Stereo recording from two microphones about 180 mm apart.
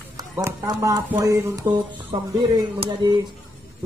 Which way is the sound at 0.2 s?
20° right (ahead or behind).